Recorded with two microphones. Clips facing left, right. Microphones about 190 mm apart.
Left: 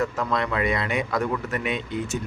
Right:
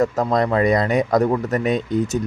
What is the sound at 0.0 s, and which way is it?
Speech, 40° right (ahead or behind).